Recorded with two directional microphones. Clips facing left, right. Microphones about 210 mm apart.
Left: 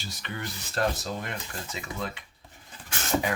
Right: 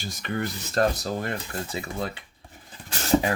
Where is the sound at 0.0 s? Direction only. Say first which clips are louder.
Right 7 dB; 50° right (ahead or behind); by 2.2 s 35° right (ahead or behind).